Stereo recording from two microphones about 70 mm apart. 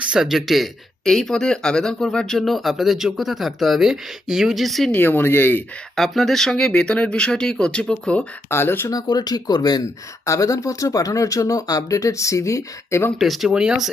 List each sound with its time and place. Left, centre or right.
0.0 s speech: centre
4.9 s speech: left
6.0 s speech: centre
8.4 s speech: left
8.9 s speech: left
10.2 s speech: left
13.1 s speech: centre